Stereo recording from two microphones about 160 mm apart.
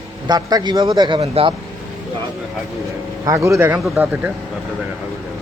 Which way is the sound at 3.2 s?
20° right (ahead or behind).